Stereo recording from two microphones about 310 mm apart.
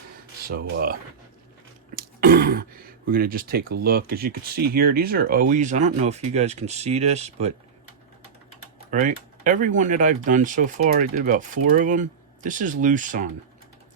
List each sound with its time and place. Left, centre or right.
0.4 s speech: right
2.0 s throat clearing: right
3.1 s speech: right
8.9 s speech: right